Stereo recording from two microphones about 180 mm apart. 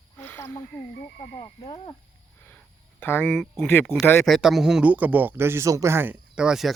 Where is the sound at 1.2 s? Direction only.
30° left (ahead or behind).